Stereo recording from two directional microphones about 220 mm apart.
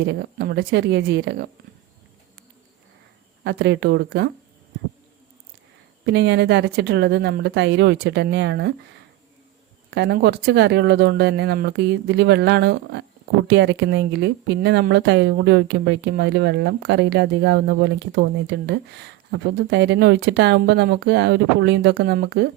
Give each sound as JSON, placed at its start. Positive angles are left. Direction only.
{"t": 0.0, "sound": "speech", "side_deg": -50}
{"t": 3.4, "sound": "speech", "side_deg": -50}
{"t": 6.1, "sound": "speech", "side_deg": -50}
{"t": 9.9, "sound": "speech", "side_deg": -50}